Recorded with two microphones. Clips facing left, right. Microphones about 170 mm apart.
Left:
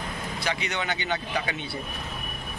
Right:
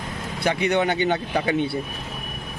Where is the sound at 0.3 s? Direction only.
55° right (ahead or behind).